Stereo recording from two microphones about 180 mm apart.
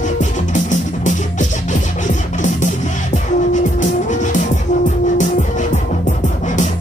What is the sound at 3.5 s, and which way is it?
Music, 45° left (ahead or behind).